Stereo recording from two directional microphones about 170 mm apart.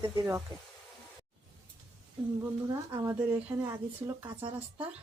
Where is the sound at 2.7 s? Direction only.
20° right (ahead or behind).